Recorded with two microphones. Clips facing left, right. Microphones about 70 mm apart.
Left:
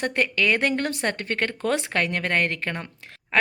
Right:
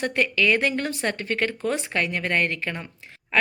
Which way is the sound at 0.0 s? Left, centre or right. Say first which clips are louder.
Right 1 dB; left.